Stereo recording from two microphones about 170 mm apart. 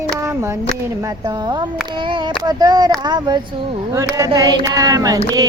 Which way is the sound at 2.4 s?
25° right (ahead or behind).